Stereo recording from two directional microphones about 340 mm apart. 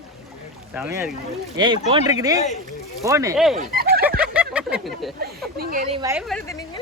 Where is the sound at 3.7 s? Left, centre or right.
Right.